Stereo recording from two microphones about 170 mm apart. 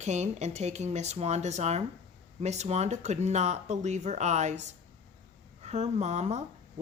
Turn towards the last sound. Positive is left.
turn(degrees=-40)  # may be behind; listen again after turning